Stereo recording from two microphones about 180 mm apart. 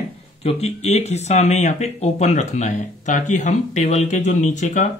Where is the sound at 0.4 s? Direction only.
35° left (ahead or behind).